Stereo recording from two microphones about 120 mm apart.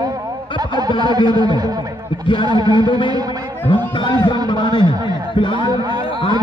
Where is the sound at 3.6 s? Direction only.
15° left (ahead or behind).